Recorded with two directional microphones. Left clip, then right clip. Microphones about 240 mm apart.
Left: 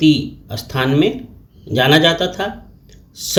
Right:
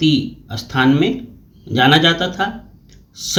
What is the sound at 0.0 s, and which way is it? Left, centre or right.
Speech, centre.